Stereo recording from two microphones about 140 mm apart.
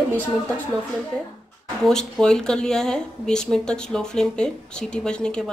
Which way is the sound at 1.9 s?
5° left (ahead or behind).